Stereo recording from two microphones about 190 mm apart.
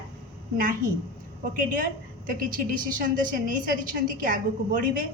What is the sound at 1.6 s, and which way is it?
Speech, 45° right (ahead or behind).